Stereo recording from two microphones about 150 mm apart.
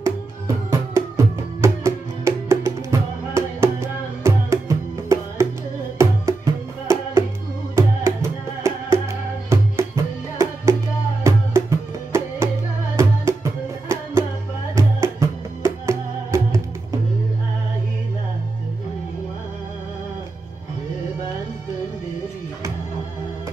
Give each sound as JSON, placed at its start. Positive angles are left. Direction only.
{"t": 0.7, "sound": "music", "side_deg": -20}